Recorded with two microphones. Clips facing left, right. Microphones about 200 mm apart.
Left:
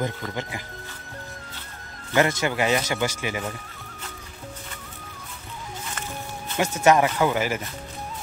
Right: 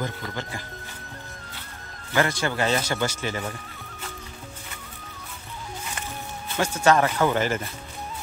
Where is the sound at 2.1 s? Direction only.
20° left (ahead or behind).